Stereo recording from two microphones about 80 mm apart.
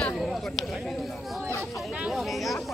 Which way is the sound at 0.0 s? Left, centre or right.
Centre.